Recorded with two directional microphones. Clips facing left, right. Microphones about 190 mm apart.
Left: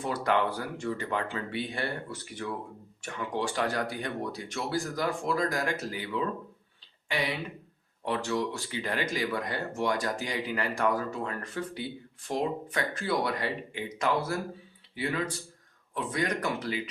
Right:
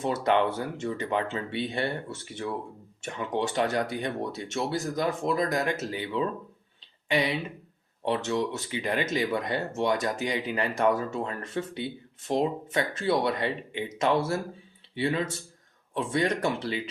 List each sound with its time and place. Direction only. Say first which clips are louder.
0.0 s speech: right 3 dB; 25° right (ahead or behind)
8.0 s speech: right 3 dB; 25° right (ahead or behind)